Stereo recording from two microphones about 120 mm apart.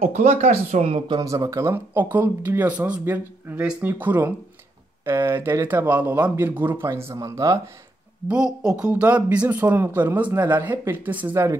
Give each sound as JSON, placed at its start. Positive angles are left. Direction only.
{"t": 0.0, "sound": "speech", "side_deg": -75}
{"t": 1.1, "sound": "speech", "side_deg": -30}
{"t": 8.3, "sound": "speech", "side_deg": -5}